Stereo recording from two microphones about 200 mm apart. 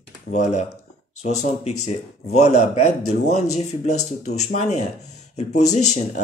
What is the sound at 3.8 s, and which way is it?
Speech, 90° left.